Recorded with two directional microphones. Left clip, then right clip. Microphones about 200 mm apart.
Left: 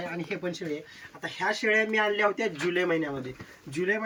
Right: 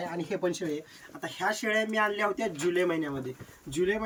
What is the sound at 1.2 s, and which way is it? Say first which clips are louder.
Speech: left 2 dB; 10° right (ahead or behind).